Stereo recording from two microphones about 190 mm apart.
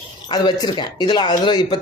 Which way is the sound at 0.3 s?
20° left (ahead or behind).